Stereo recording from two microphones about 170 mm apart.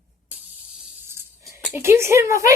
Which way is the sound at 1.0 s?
15° right (ahead or behind).